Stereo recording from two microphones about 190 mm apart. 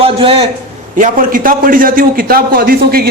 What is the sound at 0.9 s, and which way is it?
A man's voice, 45° right (ahead or behind).